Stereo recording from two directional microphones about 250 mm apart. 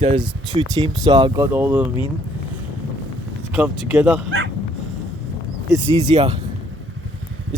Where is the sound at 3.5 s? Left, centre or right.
Centre.